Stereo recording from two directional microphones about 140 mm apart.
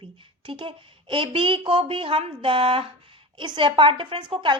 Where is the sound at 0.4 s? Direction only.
35° right (ahead or behind).